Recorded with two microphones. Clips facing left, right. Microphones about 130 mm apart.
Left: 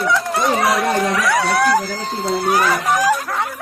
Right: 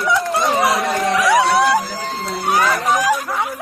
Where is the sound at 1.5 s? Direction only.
Centre (ahead or behind).